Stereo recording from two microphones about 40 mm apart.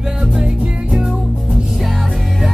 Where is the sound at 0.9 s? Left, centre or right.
Centre.